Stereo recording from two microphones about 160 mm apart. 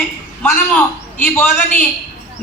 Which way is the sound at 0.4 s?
10° left (ahead or behind).